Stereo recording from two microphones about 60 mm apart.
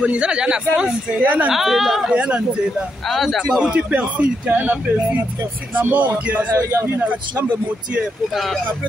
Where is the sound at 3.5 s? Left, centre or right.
Centre.